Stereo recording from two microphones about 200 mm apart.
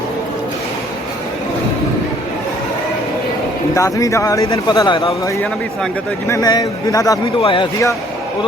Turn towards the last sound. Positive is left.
turn(degrees=25)  # may be behind; listen again after turning